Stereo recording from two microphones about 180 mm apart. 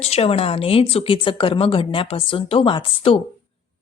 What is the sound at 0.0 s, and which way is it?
A woman's voice, 35° left (ahead or behind).